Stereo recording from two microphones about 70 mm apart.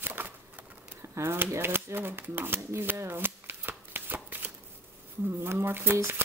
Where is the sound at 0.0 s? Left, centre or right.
Right.